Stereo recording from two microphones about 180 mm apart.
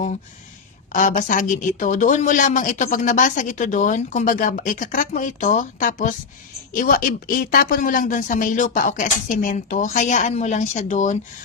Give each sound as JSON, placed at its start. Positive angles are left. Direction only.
{"t": 0.9, "sound": "speech", "side_deg": 45}